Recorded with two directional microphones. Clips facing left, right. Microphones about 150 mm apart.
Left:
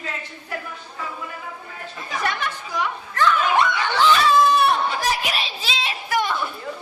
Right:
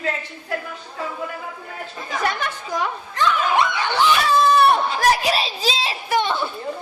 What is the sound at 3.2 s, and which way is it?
Snicker, 15° right (ahead or behind).